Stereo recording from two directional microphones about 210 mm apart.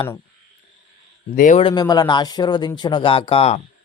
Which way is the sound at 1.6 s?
20° left (ahead or behind).